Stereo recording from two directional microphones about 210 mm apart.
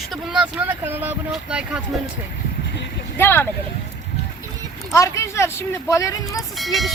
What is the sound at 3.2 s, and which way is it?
Speech, 10° left (ahead or behind).